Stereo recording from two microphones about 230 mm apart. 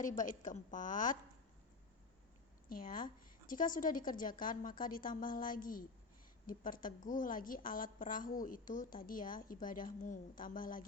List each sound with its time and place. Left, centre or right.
0.0 s a woman's voice: left
2.6 s a woman's voice: left